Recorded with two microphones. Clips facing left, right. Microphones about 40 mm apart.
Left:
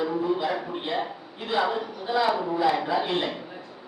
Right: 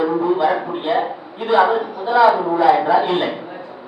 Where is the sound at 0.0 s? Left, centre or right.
Centre.